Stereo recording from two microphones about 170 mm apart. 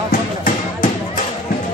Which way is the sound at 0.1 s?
50° left (ahead or behind).